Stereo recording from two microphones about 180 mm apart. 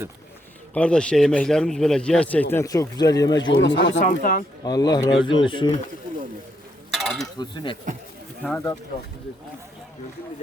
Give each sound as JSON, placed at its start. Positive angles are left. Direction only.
{"t": 0.7, "sound": "speech", "side_deg": 5}
{"t": 3.5, "sound": "speech", "side_deg": 90}
{"t": 4.0, "sound": "speech", "side_deg": 50}
{"t": 4.6, "sound": "speech", "side_deg": 20}
{"t": 6.9, "sound": "a sound", "side_deg": 0}
{"t": 7.3, "sound": "speech", "side_deg": 25}